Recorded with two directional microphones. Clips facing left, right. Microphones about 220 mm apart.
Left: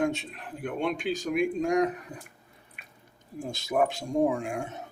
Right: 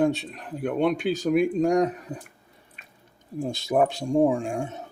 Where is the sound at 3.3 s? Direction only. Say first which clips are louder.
Right 4 dB; 35° right (ahead or behind).